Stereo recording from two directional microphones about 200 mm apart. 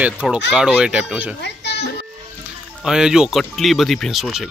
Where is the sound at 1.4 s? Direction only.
55° left (ahead or behind).